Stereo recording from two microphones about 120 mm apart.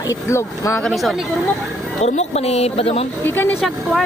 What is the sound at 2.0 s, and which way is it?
A woman's voice, 65° left (ahead or behind).